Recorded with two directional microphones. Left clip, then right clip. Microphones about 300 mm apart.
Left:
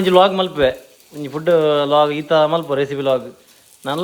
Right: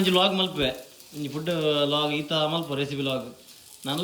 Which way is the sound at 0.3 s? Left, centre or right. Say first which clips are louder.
Left 9 dB; centre.